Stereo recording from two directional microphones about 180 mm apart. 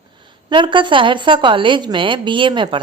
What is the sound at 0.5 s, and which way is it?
A woman's voice, 25° right (ahead or behind).